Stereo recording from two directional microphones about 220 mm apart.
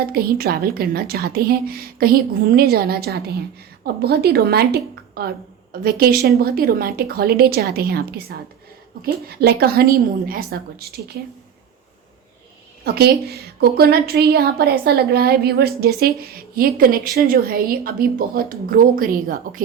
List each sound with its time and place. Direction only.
0.0 s a woman's voice: 45° right (ahead or behind)
12.8 s a woman's voice: 45° right (ahead or behind)